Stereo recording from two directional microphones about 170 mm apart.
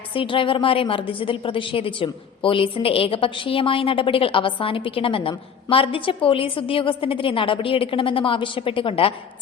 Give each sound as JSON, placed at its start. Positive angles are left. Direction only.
{"t": 0.1, "sound": "a woman's voice", "side_deg": 30}